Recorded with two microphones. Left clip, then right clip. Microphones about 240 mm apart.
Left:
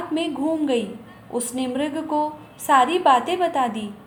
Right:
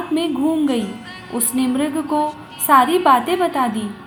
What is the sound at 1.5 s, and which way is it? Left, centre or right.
A woman's voice, centre.